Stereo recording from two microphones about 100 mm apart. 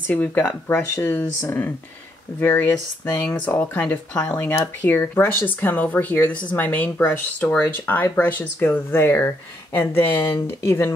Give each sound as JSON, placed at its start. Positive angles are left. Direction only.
{"t": 0.1, "sound": "speech", "side_deg": 15}
{"t": 2.4, "sound": "speech", "side_deg": 20}